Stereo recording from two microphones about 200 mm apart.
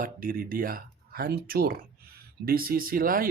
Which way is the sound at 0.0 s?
45° right (ahead or behind).